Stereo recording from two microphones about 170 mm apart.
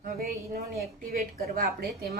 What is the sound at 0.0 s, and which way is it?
A woman's voice, 60° right (ahead or behind).